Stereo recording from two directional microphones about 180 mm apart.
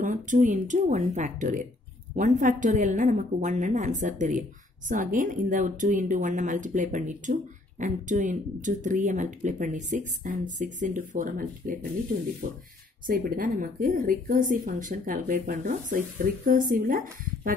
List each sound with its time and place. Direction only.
0.0 s speech: 45° right (ahead or behind)
13.0 s speech: 50° right (ahead or behind)